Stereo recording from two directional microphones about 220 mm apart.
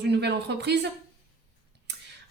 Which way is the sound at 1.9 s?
50° right (ahead or behind).